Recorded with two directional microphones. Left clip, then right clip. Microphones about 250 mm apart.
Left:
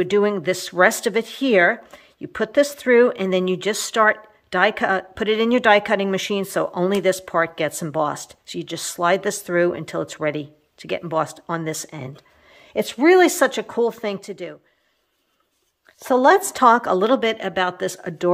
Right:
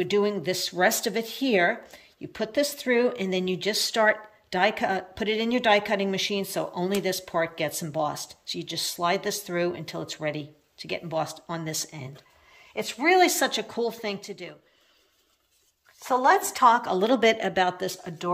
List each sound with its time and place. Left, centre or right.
0.0 s speech: centre
12.5 s speech: left
16.0 s speech: left